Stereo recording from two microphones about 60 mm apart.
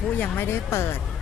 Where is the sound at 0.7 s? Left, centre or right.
Left.